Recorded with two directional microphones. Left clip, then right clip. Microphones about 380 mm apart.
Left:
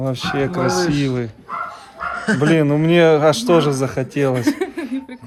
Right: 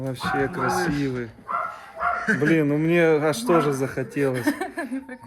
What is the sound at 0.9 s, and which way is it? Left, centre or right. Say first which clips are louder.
Speech: left 6 dB; left.